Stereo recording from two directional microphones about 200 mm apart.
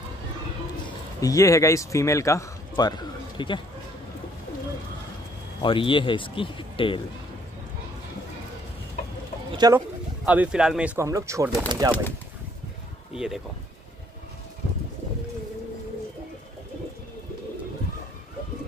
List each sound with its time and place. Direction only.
0.8 s a man's voice: 15° left (ahead or behind)
5.6 s speech: 25° left (ahead or behind)
9.6 s speech: 15° right (ahead or behind)
13.1 s speech: 5° right (ahead or behind)